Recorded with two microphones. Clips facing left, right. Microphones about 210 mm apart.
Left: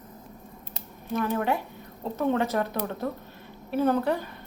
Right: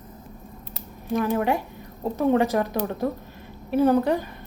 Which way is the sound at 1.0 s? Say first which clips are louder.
Right 4 dB; 15° right (ahead or behind).